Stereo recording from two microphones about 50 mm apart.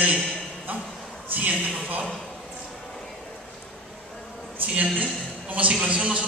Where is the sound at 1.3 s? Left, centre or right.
Right.